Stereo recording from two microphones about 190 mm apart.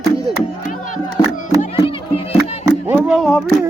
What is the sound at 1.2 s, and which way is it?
Music, 20° left (ahead or behind).